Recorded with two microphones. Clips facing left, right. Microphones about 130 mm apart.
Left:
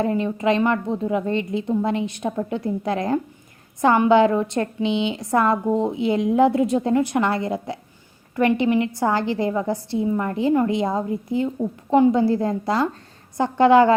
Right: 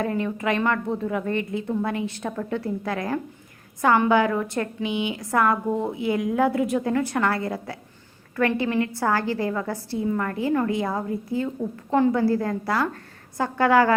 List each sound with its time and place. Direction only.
0.0 s a woman's voice: 25° left (ahead or behind)